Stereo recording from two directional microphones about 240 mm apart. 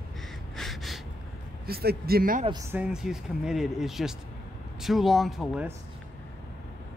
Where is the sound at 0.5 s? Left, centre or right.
Centre.